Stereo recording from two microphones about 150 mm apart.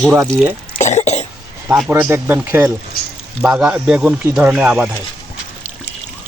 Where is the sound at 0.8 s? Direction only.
50° left (ahead or behind).